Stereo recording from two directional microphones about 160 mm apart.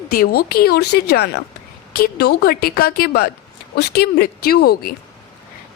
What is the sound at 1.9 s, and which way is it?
A woman's voice, 75° left (ahead or behind).